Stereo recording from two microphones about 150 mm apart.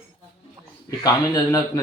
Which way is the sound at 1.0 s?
25° left (ahead or behind).